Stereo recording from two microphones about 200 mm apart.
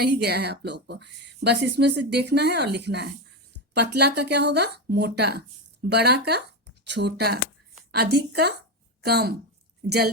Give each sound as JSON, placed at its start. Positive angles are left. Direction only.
{"t": 0.0, "sound": "a woman's voice", "side_deg": -55}